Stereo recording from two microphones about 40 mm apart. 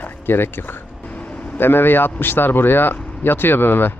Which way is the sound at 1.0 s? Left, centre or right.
Left.